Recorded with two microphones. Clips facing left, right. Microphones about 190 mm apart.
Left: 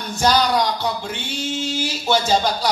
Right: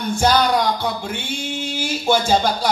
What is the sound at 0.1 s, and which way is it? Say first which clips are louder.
Speech: right 1 dB; 55° right (ahead or behind).